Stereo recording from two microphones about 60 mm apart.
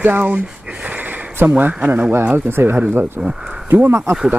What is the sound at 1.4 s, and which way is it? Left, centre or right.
Speech, right.